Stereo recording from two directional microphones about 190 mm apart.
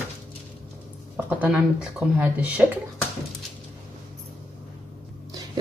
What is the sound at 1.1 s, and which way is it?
Speech, 10° right (ahead or behind).